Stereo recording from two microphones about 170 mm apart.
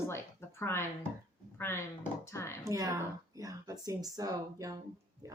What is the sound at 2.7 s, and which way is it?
Speech, 20° right (ahead or behind).